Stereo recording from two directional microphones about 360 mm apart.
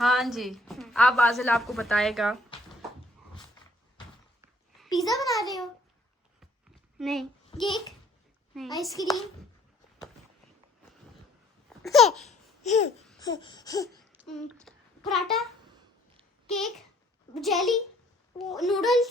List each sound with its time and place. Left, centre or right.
0.0 s a woman's voice: centre
4.4 s a sound: centre
7.0 s a woman's voice: centre
7.6 s a child's voice: centre
8.5 s a woman's voice: centre
11.8 s a woman's voice: centre
12.6 s babbling: centre
13.1 s a sound: centre
13.9 s a sound: centre
16.5 s a child's voice: centre